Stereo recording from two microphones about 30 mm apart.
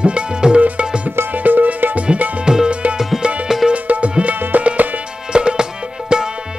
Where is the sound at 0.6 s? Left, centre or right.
Right.